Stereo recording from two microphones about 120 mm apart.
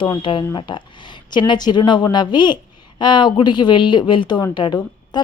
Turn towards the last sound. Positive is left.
turn(degrees=40)  # may be behind; listen again after turning